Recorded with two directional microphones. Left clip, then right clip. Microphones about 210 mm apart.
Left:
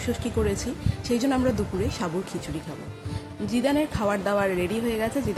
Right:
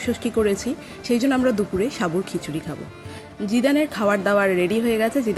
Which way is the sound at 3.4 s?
15° right (ahead or behind).